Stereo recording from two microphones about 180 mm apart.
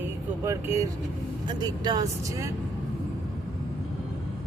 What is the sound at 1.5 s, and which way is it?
Speech, 25° right (ahead or behind).